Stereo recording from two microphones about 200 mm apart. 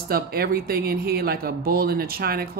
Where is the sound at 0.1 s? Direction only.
50° right (ahead or behind).